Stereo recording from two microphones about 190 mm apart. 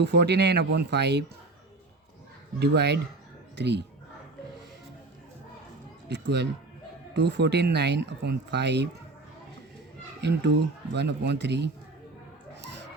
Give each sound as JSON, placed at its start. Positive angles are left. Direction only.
{"t": 0.0, "sound": "speech", "side_deg": -65}
{"t": 2.6, "sound": "speech", "side_deg": -60}
{"t": 6.1, "sound": "speech", "side_deg": -65}
{"t": 10.2, "sound": "speech", "side_deg": -60}